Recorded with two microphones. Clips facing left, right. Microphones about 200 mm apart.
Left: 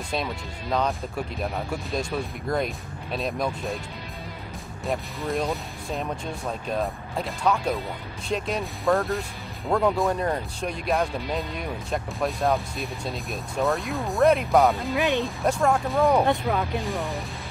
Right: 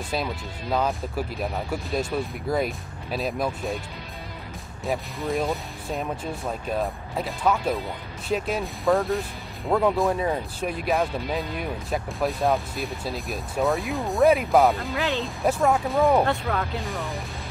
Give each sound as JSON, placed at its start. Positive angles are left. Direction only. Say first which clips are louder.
{"t": 0.1, "sound": "speech", "louder": "even", "side_deg": -5}
{"t": 4.8, "sound": "speech", "louder": "right 1 dB", "side_deg": 0}
{"t": 15.0, "sound": "speech", "louder": "left 3 dB", "side_deg": 15}
{"t": 15.2, "sound": "speech", "louder": "right 1 dB", "side_deg": 0}
{"t": 16.3, "sound": "speech", "louder": "left 2 dB", "side_deg": 15}
{"t": 16.8, "sound": "speech", "louder": "left 2 dB", "side_deg": 0}